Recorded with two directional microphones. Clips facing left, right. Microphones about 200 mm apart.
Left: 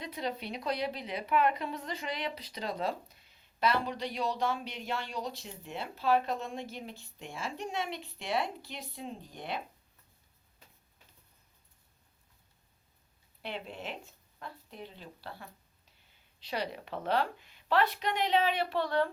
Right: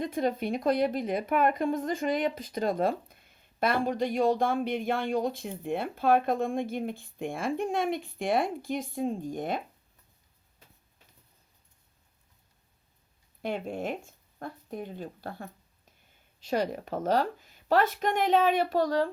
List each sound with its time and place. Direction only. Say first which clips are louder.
0.0 s speech: right 8 dB; 50° right (ahead or behind)
13.4 s speech: right 8 dB; 50° right (ahead or behind)